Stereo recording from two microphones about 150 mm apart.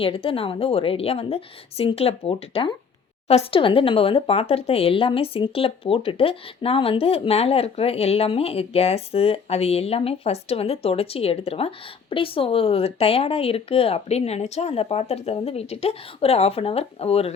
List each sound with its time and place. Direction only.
0.0 s speech: 35° left (ahead or behind)